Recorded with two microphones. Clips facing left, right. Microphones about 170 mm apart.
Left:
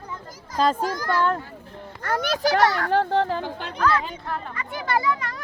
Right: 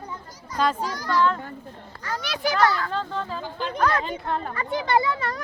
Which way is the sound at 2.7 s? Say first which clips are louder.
Left 7 dB; 65° left (ahead or behind).